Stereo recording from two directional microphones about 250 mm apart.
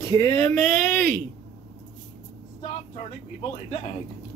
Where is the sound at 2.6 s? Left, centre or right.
Left.